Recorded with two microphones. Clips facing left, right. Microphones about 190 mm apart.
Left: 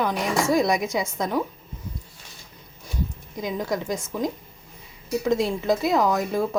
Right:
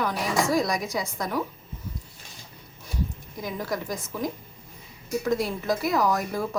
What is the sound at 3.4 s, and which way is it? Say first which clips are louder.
Speech: left 4 dB; 20° left (ahead or behind).